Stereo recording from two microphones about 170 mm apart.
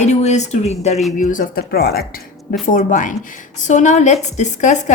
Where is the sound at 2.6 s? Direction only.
50° left (ahead or behind).